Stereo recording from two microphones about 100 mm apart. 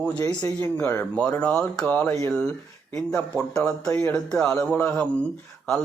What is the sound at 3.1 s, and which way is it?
Speech, 30° left (ahead or behind).